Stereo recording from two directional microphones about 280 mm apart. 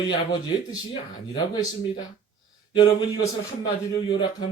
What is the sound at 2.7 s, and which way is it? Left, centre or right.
A man's voice, centre.